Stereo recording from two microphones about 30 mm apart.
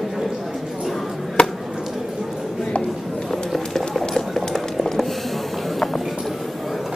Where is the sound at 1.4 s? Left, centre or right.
Left.